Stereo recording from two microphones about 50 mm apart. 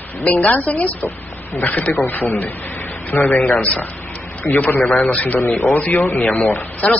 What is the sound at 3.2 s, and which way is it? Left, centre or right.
Speech, centre.